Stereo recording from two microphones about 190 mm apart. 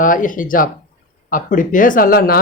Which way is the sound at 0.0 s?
45° left (ahead or behind).